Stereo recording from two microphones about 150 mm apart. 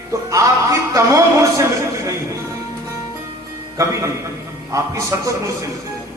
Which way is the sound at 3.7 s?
20° right (ahead or behind).